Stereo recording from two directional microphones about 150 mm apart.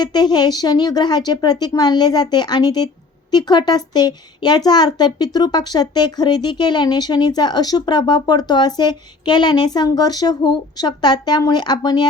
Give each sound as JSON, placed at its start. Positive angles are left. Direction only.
{"t": 0.0, "sound": "speech", "side_deg": 25}